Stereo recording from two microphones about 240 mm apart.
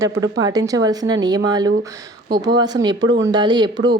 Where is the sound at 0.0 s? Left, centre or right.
Centre.